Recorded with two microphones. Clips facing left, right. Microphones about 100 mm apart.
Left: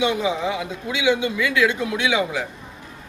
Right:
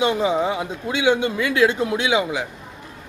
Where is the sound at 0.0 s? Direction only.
35° right (ahead or behind); by 2.5 s 20° right (ahead or behind).